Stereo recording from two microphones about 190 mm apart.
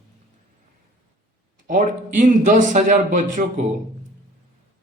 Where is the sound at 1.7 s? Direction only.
40° right (ahead or behind).